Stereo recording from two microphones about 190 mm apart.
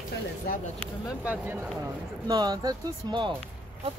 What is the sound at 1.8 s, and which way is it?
Speech, 20° right (ahead or behind).